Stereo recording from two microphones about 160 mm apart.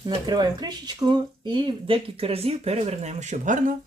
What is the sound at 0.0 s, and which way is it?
Speech, 25° right (ahead or behind).